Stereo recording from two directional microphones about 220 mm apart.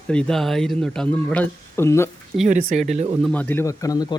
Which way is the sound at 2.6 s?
35° right (ahead or behind).